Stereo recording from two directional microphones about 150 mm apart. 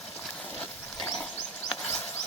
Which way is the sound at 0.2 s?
5° left (ahead or behind).